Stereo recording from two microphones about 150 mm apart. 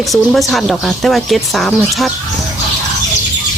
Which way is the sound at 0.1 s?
Centre (ahead or behind).